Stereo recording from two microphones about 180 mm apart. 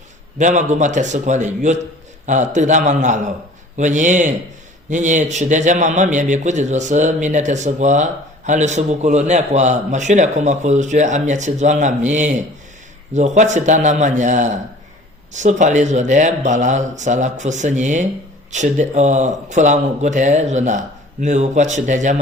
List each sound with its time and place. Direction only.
0.3 s a man's voice: 40° right (ahead or behind)